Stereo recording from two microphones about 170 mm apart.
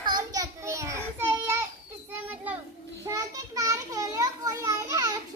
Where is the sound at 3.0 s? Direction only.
20° right (ahead or behind).